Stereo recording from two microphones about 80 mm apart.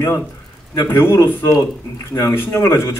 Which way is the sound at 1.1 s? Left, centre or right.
Left.